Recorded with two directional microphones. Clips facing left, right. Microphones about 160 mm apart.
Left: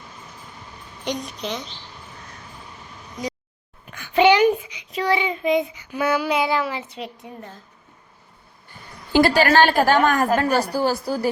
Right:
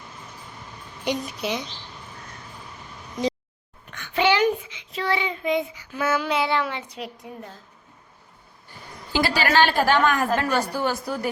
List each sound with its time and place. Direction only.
1.0 s a woman's voice: 5° right (ahead or behind)
3.8 s child singing: 10° left (ahead or behind)
6.6 s a woman's voice: 5° left (ahead or behind)
9.1 s a woman's voice: 50° left (ahead or behind); by 11.3 s 30° left (ahead or behind)